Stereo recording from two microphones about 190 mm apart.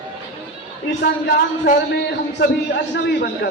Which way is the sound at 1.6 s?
55° left (ahead or behind).